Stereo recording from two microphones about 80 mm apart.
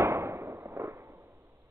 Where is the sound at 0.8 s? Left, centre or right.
Right.